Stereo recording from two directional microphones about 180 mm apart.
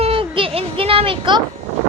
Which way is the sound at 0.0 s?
30° right (ahead or behind).